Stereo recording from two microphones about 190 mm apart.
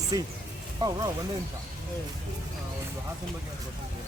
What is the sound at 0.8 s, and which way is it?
Speech, 20° right (ahead or behind).